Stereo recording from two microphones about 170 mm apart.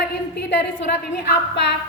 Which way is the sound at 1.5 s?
85° left.